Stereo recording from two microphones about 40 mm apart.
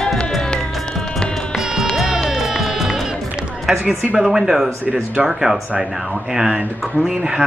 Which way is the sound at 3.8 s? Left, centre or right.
Right.